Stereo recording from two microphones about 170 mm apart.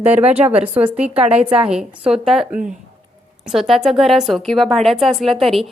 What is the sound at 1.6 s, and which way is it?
A woman's voice, 5° right (ahead or behind).